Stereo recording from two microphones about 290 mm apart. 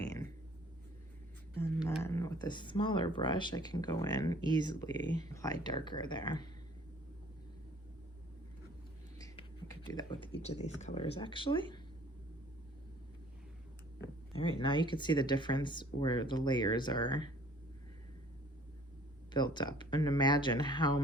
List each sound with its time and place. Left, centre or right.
0.0 s a sound: centre
2.0 s speech: centre
9.1 s computer keyboard: centre
10.6 s speech: left
14.6 s speech: centre
19.3 s speech: centre